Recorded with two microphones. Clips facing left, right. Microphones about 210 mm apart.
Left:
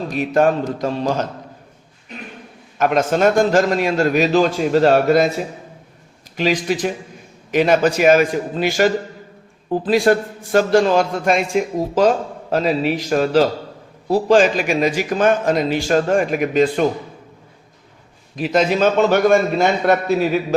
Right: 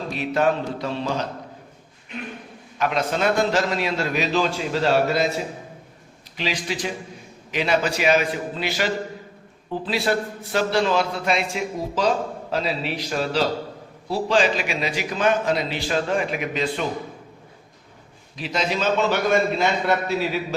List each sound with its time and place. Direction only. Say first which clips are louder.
0.1 s a man's voice: left 5 dB; 45° left (ahead or behind)
2.1 s a sound: right 1 dB; 40° left (ahead or behind)
2.7 s a man's voice: left 7 dB; 45° left (ahead or behind)
6.3 s a man's voice: left 9 dB; 50° left (ahead or behind)
18.3 s a man's voice: left 8 dB; 50° left (ahead or behind)